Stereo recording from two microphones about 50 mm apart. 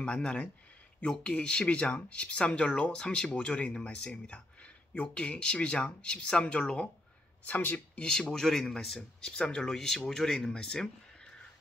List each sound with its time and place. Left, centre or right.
0.0 s speech: left
7.4 s speech: left
8.0 s speech: centre
9.2 s speech: centre